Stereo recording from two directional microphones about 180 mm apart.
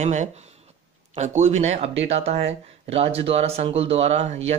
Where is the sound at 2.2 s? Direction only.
35° right (ahead or behind).